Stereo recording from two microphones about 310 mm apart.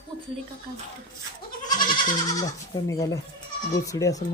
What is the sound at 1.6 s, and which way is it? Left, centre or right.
Goat, centre.